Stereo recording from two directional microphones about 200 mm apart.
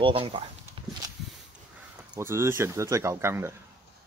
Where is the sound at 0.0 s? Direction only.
25° right (ahead or behind).